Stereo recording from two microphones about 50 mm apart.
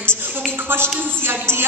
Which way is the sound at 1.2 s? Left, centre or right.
Right.